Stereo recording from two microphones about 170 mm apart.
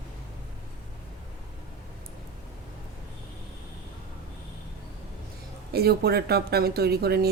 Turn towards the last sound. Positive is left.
turn(degrees=-65)  # may be behind; listen again after turning